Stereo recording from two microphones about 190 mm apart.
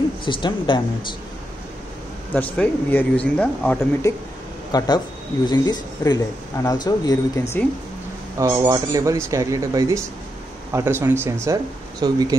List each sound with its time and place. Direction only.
0.2 s speech: 25° left (ahead or behind)
2.3 s speech: 10° left (ahead or behind)
4.1 s speech: 15° left (ahead or behind)
8.4 s speech: 20° right (ahead or behind)